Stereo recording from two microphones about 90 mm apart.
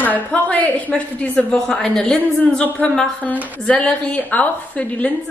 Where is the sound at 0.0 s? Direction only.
15° left (ahead or behind).